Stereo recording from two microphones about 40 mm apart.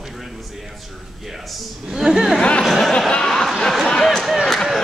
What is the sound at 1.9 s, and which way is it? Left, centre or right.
Speech, centre.